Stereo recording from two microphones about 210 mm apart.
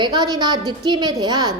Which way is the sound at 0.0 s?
20° right (ahead or behind).